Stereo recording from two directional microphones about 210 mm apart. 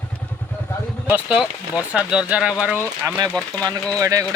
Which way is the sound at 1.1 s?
5° right (ahead or behind).